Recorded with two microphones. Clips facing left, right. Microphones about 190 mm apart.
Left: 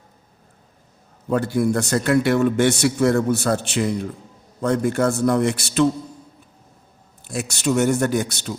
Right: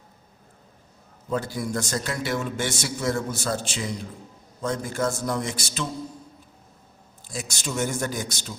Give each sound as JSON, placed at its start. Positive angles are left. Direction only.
{"t": 1.3, "sound": "a man's voice", "side_deg": 60}
{"t": 7.3, "sound": "a man's voice", "side_deg": 65}